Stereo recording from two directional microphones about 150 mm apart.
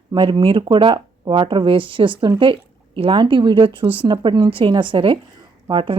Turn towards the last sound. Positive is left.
turn(degrees=-35)  # may be behind; listen again after turning